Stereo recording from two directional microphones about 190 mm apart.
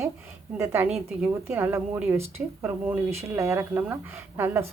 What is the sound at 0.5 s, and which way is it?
A woman's voice, 15° right (ahead or behind).